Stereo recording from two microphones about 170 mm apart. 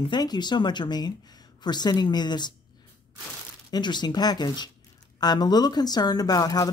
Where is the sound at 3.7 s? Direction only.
25° left (ahead or behind).